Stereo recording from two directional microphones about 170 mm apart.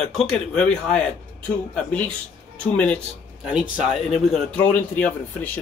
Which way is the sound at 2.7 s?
5° left (ahead or behind).